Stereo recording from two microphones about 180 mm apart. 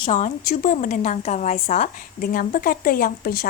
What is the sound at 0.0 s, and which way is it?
A woman's voice, 40° left (ahead or behind).